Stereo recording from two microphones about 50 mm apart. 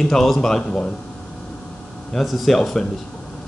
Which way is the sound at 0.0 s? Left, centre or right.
Centre.